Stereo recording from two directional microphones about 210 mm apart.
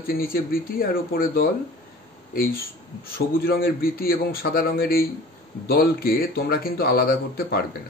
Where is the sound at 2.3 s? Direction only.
45° left (ahead or behind).